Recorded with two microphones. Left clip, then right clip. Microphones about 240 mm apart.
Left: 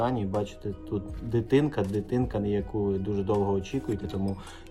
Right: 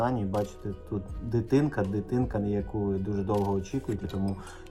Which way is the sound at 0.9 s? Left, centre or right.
Right.